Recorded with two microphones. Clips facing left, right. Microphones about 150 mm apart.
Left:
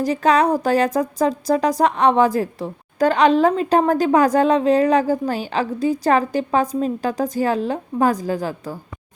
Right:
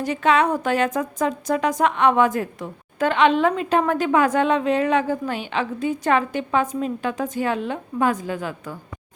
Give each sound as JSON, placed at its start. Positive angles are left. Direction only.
{"t": 0.0, "sound": "a woman's voice", "side_deg": 35}